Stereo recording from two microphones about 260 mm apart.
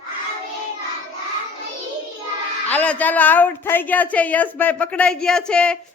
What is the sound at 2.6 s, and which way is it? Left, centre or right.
A woman's voice, centre.